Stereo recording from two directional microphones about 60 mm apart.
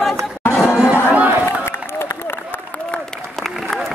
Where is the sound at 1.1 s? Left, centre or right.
Right.